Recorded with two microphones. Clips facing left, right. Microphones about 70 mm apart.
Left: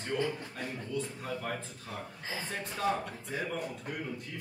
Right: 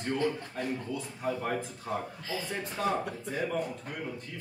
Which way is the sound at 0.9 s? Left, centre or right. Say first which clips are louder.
Right 2 dB; centre.